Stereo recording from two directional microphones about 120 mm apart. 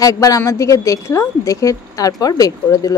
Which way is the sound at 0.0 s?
30° left (ahead or behind).